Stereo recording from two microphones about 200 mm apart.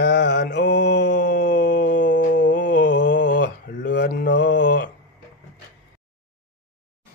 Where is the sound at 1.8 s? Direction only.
40° left (ahead or behind).